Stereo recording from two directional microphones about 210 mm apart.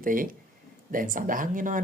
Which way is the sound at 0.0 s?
40° right (ahead or behind).